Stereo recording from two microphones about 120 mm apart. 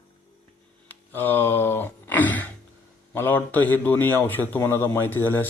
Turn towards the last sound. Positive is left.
turn(degrees=20)  # may be behind; listen again after turning